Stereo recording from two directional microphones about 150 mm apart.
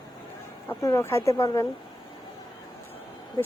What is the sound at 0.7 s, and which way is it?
Speech, 20° left (ahead or behind).